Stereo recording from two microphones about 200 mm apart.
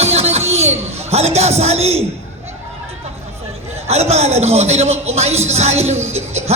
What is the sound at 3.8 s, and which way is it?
A man's voice, 30° right (ahead or behind).